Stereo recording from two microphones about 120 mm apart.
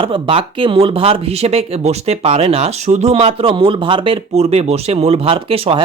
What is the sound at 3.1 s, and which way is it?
Speech, 50° right (ahead or behind).